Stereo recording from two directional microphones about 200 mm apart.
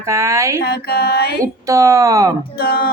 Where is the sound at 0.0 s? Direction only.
15° right (ahead or behind).